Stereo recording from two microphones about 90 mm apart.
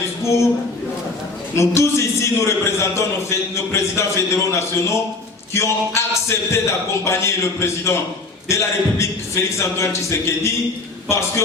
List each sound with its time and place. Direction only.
1.5 s a man's voice: 35° left (ahead or behind)